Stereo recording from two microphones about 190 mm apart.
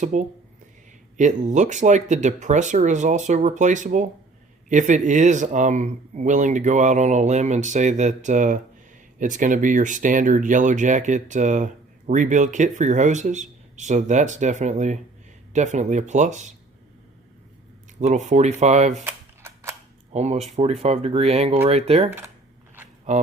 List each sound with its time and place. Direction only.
0.0 s speech: 40° right (ahead or behind)
18.0 s speech: 40° right (ahead or behind)
19.0 s a sound: 15° right (ahead or behind)
20.1 s speech: 35° right (ahead or behind)